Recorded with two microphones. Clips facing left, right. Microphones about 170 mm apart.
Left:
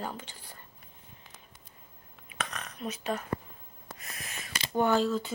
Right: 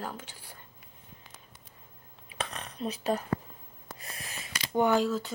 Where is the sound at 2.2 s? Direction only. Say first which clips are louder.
Right 1 dB; 30° right (ahead or behind).